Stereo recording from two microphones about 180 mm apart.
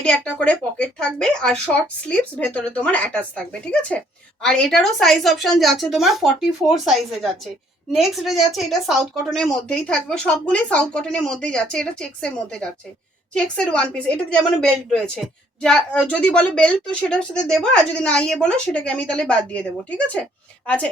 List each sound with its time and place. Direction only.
0.0 s a woman's voice: 5° left (ahead or behind)
20.7 s a woman's voice: 5° left (ahead or behind)